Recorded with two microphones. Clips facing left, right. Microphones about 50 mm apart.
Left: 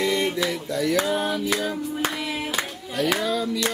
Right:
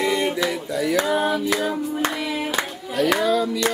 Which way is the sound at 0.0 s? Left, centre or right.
Centre.